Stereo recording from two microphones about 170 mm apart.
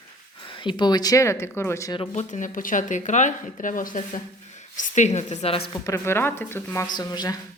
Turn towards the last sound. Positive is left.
turn(degrees=25)  # may be behind; listen again after turning